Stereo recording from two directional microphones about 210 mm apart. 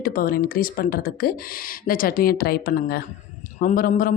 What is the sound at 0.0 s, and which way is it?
Speech, 45° left (ahead or behind).